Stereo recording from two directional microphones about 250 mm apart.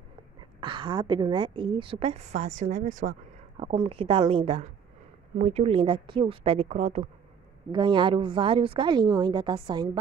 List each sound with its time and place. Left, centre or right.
0.6 s a woman's voice: centre